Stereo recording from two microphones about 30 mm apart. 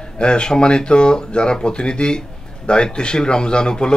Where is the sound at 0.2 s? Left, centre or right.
Left.